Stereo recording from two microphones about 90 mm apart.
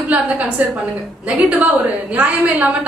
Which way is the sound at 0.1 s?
10° right (ahead or behind).